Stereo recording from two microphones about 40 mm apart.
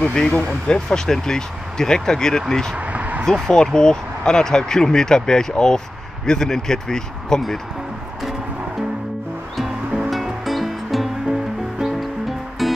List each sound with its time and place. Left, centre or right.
0.0 s speech: centre
2.8 s a sound: right
3.3 s speech: centre
10.0 s music: centre